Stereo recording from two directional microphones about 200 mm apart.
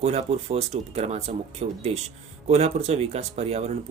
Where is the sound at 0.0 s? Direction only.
30° right (ahead or behind).